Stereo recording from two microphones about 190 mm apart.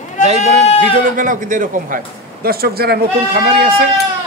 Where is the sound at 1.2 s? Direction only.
45° right (ahead or behind).